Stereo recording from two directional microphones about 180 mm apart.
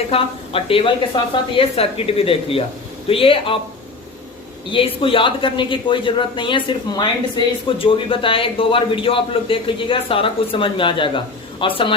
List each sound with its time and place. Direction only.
0.1 s a woman's voice: 30° left (ahead or behind)
4.7 s speech: 30° left (ahead or behind)